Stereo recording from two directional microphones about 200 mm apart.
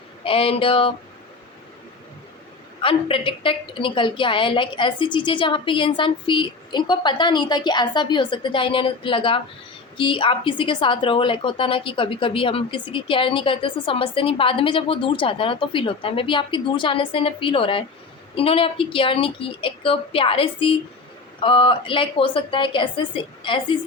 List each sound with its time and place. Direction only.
0.3 s a woman's voice: 30° left (ahead or behind)
2.8 s a woman's voice: 25° left (ahead or behind)